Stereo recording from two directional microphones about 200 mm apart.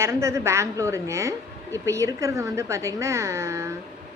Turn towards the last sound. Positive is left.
turn(degrees=-15)  # may be behind; listen again after turning